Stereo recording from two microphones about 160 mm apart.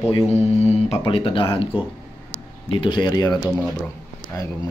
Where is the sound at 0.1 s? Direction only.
40° left (ahead or behind); by 3.3 s 25° left (ahead or behind).